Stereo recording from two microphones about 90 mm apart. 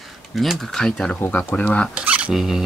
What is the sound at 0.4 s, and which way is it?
Speech, centre (ahead or behind).